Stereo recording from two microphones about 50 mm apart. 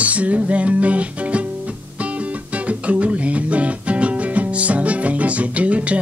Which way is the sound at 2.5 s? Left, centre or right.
Right.